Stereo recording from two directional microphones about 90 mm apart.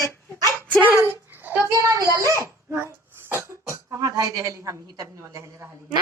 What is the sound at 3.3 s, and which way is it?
Cough, 35° right (ahead or behind).